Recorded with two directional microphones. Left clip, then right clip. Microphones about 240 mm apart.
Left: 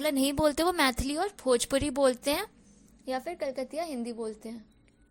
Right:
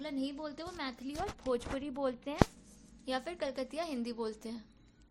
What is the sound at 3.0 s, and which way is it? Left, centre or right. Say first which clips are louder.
A woman's voice: left 4 dB; centre.